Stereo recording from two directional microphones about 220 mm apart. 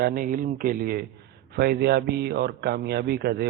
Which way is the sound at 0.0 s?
40° right (ahead or behind).